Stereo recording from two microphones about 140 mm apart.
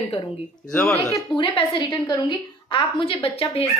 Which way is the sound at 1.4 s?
35° left (ahead or behind).